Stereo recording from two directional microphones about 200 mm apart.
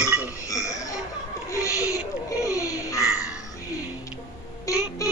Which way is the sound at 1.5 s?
15° left (ahead or behind).